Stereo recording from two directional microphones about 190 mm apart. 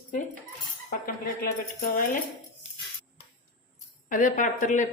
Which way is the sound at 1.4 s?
50° left (ahead or behind).